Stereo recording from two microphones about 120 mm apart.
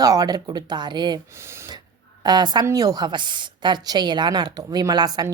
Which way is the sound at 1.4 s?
20° right (ahead or behind).